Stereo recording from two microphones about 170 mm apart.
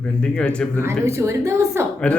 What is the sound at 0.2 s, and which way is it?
Speech, 5° left (ahead or behind).